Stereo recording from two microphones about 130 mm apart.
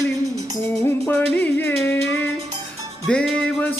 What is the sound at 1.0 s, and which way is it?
Music, 15° left (ahead or behind).